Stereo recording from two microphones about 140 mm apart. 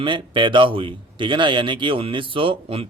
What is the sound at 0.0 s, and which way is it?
A man's voice, 35° right (ahead or behind).